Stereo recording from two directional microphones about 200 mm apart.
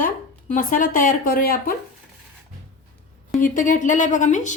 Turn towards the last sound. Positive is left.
turn(degrees=40)  # may be behind; listen again after turning